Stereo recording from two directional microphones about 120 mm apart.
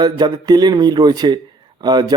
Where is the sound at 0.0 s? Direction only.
35° right (ahead or behind).